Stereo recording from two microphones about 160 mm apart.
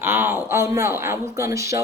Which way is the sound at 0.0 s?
15° right (ahead or behind).